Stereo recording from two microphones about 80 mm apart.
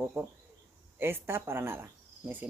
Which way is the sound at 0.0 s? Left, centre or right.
Right.